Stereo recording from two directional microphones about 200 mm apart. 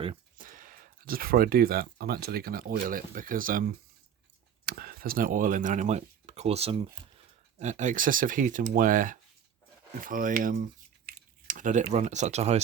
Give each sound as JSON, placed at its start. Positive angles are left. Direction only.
{"t": 0.3, "sound": "speech", "side_deg": -45}
{"t": 4.6, "sound": "speech", "side_deg": -50}